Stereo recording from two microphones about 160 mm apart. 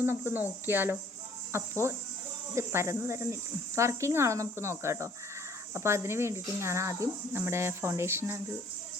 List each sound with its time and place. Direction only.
0.0 s speech: 15° right (ahead or behind)